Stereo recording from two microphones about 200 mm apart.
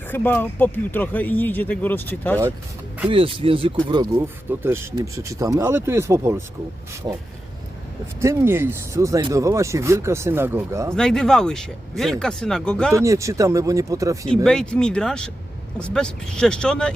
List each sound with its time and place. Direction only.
0.1 s speech: 10° left (ahead or behind)
3.1 s speech: 25° right (ahead or behind)
8.2 s speech: 15° right (ahead or behind)
10.9 s speech: 5° left (ahead or behind)
12.9 s speech: 15° right (ahead or behind)
14.4 s speech: 5° left (ahead or behind)